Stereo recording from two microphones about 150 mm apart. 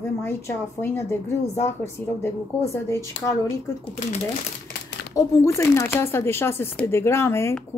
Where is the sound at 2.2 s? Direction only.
20° left (ahead or behind).